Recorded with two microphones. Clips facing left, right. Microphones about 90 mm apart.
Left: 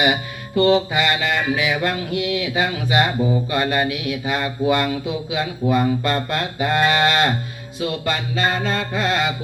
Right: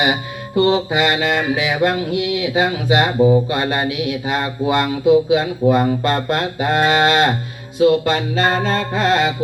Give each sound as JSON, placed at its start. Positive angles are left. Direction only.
{"t": 0.0, "sound": "speech", "side_deg": -25}
{"t": 3.2, "sound": "speech", "side_deg": -50}
{"t": 3.5, "sound": "speech", "side_deg": -30}
{"t": 7.8, "sound": "music", "side_deg": -30}